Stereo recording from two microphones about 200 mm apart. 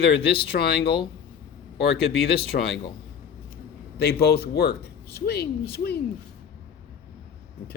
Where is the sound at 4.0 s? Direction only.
50° left (ahead or behind).